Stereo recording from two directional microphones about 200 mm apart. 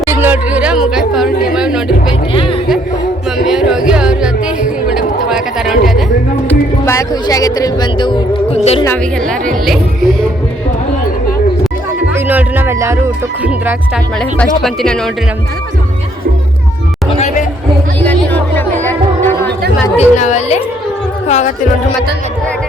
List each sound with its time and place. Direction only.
0.0 s a sound: 10° right (ahead or behind)
2.0 s music: 25° left (ahead or behind)
3.4 s music: centre (ahead or behind)
5.5 s a sound: centre (ahead or behind)
6.5 s speech: 15° left (ahead or behind); by 8.8 s 30° left (ahead or behind)
9.6 s speech: centre (ahead or behind)
12.1 s music: 10° right (ahead or behind)
13.4 s speech: 5° right (ahead or behind)
14.2 s speech: 5° left (ahead or behind)
17.1 s a sound: 35° left (ahead or behind)
18.0 s music: 10° left (ahead or behind)
20.0 s a woman's voice: 35° left (ahead or behind)